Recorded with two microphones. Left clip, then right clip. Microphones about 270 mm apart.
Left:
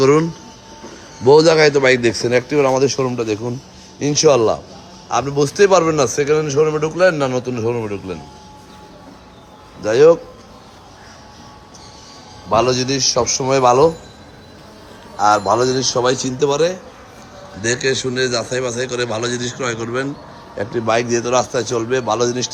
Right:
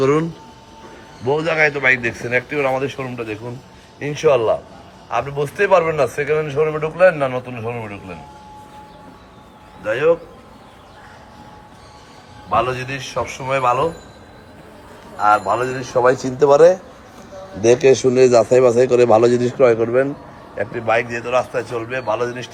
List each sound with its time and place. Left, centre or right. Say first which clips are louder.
0.0 s a man's voice: left 3 dB; centre
1.3 s a man's voice: left 7 dB; centre
9.8 s a man's voice: left 6 dB; centre
12.5 s a man's voice: left 3 dB; centre
15.2 s a man's voice: left 2 dB; centre
17.9 s a man's voice: right 7 dB; centre
20.6 s a man's voice: left 1 dB; centre